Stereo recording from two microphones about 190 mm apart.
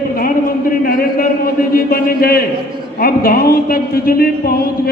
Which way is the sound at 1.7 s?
50° left (ahead or behind).